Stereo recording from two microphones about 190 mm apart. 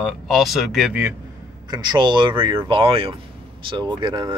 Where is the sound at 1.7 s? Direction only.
25° right (ahead or behind).